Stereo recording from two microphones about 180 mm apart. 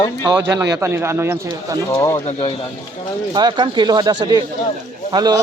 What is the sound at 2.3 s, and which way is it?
Speech, 30° left (ahead or behind).